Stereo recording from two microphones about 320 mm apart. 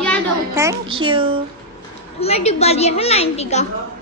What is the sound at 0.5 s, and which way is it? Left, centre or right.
Speech, centre.